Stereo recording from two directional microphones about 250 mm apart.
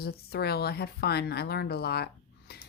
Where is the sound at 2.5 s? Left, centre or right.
Left.